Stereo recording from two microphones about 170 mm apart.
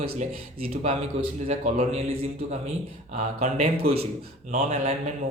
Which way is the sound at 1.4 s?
40° right (ahead or behind).